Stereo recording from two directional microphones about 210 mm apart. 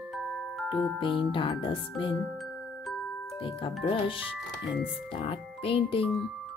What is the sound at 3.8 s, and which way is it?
Music, 25° left (ahead or behind).